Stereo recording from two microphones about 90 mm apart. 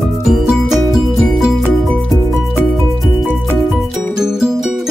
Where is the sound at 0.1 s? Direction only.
Centre (ahead or behind).